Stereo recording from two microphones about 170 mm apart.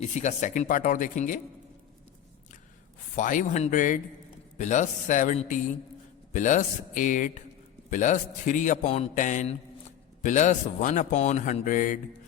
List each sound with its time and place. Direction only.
0.0 s a man's voice: 45° left (ahead or behind)
3.2 s a man's voice: 50° left (ahead or behind)